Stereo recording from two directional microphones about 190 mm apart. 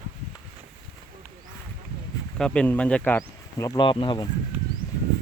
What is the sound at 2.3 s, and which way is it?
Speech, 5° left (ahead or behind).